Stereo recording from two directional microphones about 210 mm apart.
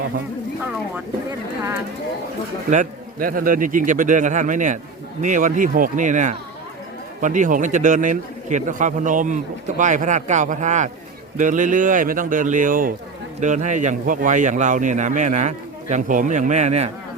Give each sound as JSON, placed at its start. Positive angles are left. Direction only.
{"t": 2.6, "sound": "a man's voice", "side_deg": -40}